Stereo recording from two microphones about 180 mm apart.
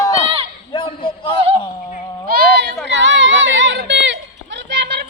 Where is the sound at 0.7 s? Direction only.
25° left (ahead or behind).